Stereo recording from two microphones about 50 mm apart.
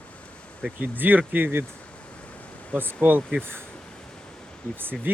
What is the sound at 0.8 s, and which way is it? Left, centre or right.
Speech, right.